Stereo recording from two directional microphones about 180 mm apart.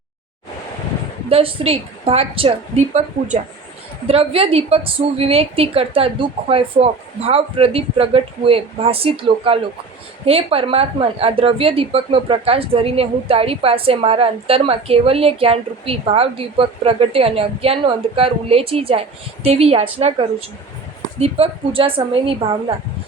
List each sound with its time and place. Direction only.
1.3 s speech: 30° right (ahead or behind)
4.0 s speech: 30° right (ahead or behind)